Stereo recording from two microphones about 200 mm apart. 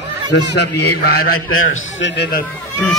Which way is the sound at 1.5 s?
90° left.